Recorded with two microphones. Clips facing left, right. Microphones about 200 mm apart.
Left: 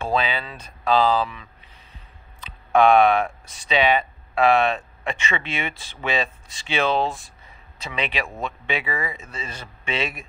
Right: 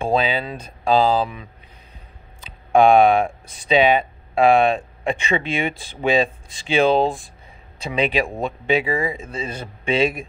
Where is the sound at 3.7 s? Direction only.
50° right (ahead or behind).